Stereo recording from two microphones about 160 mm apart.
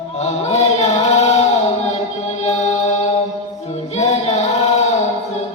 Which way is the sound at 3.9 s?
40° left (ahead or behind).